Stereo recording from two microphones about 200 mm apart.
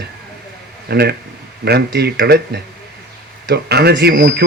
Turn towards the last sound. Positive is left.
turn(degrees=-55)  # may be behind; listen again after turning